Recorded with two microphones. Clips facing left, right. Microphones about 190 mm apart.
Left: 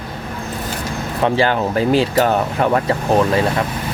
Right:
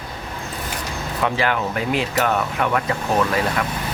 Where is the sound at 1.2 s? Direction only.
30° left (ahead or behind).